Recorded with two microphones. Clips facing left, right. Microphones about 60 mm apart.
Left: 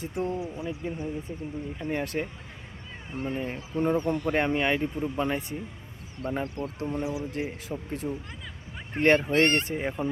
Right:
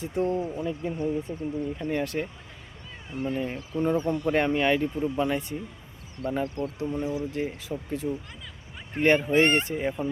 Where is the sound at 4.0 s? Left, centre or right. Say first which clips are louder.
Right 1 dB; left.